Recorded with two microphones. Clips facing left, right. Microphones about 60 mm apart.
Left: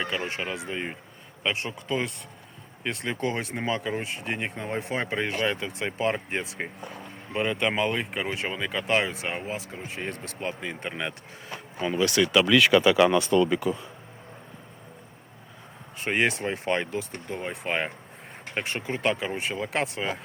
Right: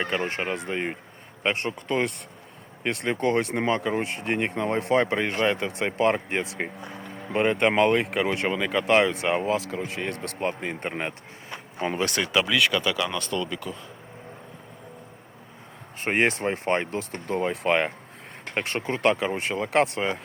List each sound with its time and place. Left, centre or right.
0.3 s speech: right
7.3 s speech: right
9.6 s speech: right
12.2 s speech: right
12.5 s speech: centre
12.7 s speech: left
16.0 s speech: right
17.2 s speech: right